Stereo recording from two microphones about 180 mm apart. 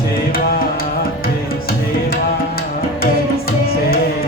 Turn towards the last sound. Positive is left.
turn(degrees=55)  # may be behind; listen again after turning